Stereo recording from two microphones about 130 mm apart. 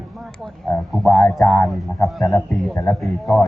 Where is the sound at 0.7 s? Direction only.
15° left (ahead or behind).